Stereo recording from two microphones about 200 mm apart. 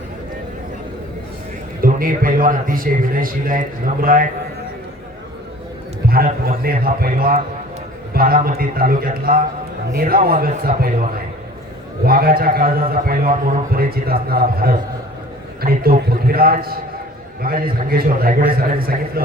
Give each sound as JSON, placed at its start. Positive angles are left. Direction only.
{"t": 1.8, "sound": "a man's voice", "side_deg": -45}
{"t": 6.1, "sound": "a man's voice", "side_deg": -50}
{"t": 12.0, "sound": "a man's voice", "side_deg": -50}